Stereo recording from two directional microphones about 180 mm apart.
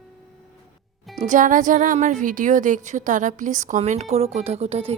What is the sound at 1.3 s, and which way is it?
A woman's voice, 45° right (ahead or behind).